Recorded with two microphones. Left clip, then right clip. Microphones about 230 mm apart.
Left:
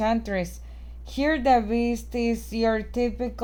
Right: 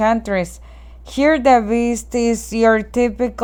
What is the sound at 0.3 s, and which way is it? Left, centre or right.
Speech, centre.